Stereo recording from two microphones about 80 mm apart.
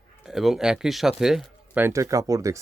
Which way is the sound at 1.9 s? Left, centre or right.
Right.